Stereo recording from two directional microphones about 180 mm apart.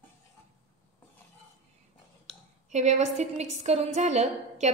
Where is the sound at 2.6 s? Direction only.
40° right (ahead or behind).